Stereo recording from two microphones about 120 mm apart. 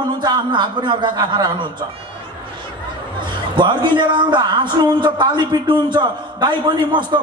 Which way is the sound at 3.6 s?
40° right (ahead or behind).